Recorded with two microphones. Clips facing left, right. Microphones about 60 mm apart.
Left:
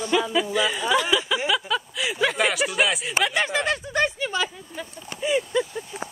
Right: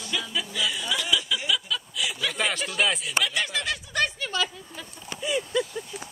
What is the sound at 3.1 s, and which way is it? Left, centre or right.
Speech, left.